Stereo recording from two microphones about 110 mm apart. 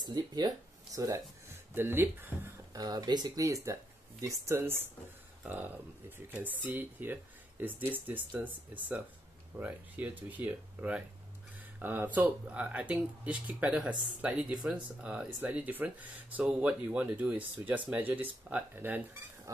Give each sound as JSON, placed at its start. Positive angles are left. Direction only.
{"t": 0.0, "sound": "speech", "side_deg": -40}
{"t": 1.8, "sound": "speech", "side_deg": -20}
{"t": 2.7, "sound": "speech", "side_deg": -35}
{"t": 9.6, "sound": "speech", "side_deg": -15}